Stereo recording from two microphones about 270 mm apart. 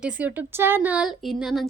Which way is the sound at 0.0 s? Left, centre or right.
Centre.